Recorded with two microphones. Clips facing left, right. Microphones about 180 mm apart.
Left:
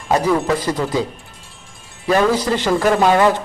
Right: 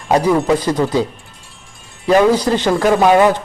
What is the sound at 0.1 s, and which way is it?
Speech, 15° right (ahead or behind).